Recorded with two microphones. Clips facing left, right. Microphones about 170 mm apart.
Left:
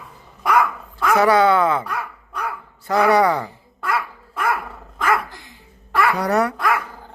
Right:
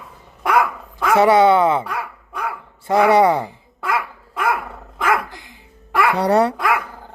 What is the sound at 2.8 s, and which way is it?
Speech, 25° right (ahead or behind).